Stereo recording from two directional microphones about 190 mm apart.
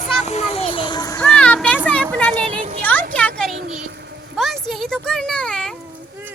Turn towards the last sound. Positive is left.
turn(degrees=5)  # may be behind; listen again after turning